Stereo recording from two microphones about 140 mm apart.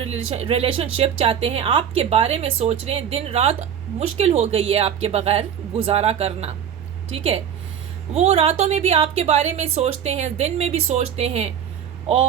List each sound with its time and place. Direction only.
0.0 s speech: 50° right (ahead or behind)
8.1 s speech: 50° right (ahead or behind)